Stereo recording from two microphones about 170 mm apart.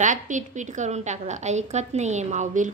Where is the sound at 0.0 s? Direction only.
45° right (ahead or behind).